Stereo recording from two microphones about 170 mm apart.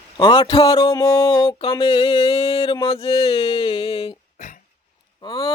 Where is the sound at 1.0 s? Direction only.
20° left (ahead or behind).